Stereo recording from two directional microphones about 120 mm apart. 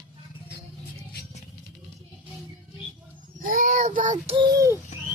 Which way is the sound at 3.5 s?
90° right.